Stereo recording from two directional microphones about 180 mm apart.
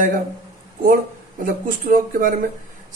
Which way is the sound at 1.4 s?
50° right (ahead or behind).